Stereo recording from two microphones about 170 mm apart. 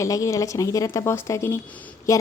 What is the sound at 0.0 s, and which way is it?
A woman's voice, 20° left (ahead or behind).